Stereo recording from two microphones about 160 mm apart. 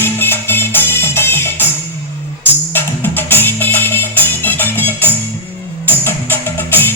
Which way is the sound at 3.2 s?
15° left (ahead or behind).